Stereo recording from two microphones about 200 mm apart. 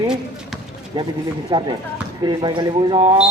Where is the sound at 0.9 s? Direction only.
25° right (ahead or behind).